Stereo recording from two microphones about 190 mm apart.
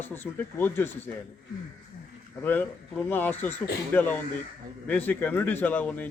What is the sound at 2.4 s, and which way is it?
A man's voice, 10° left (ahead or behind).